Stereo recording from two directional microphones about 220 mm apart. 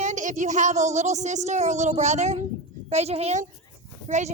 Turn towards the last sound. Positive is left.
turn(degrees=-30)  # may be behind; listen again after turning